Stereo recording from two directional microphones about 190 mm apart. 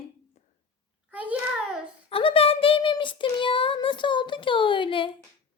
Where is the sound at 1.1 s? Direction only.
10° right (ahead or behind).